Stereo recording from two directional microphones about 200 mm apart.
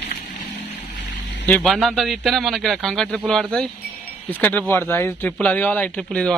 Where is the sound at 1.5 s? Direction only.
5° left (ahead or behind).